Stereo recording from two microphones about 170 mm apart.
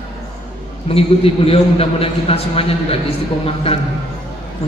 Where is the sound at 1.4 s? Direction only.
35° left (ahead or behind).